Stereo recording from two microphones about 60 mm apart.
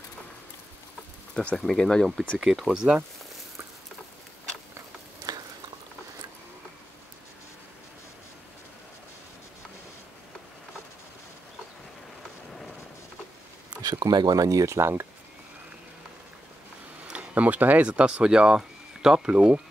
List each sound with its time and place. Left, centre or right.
1.4 s speech: centre
2.0 s speech: centre
5.3 s chewing: right
14.0 s speech: right
17.3 s speech: right